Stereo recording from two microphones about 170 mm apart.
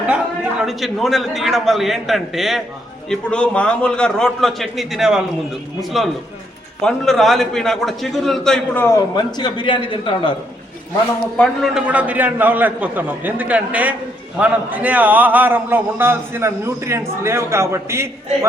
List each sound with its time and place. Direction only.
0.6 s a man's voice: centre (ahead or behind)
9.1 s a man's voice: 25° left (ahead or behind)
11.3 s a man's voice: centre (ahead or behind)